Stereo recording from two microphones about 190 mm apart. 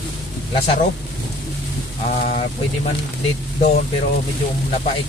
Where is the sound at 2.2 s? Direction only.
40° left (ahead or behind).